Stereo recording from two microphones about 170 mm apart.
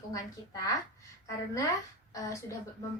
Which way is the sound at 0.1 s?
20° left (ahead or behind).